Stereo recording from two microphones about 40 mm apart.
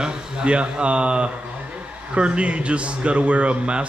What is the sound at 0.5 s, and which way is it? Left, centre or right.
Speech, right.